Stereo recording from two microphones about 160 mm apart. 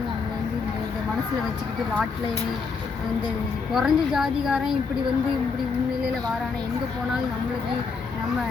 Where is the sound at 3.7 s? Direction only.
Centre (ahead or behind).